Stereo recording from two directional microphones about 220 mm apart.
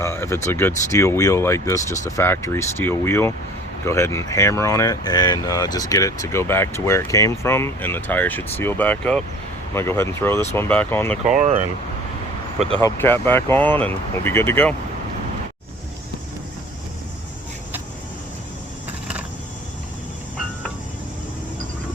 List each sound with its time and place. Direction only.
0.0 s speech: 10° left (ahead or behind)
11.3 s speech: 30° right (ahead or behind)
12.8 s speech: 10° left (ahead or behind)